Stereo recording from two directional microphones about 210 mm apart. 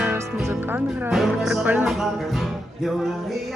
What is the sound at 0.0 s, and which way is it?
Music, 10° right (ahead or behind).